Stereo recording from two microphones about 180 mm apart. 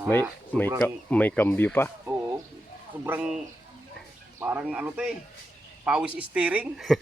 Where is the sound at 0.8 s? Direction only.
10° left (ahead or behind).